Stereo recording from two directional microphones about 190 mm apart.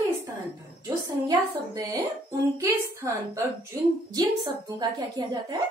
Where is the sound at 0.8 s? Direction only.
20° right (ahead or behind).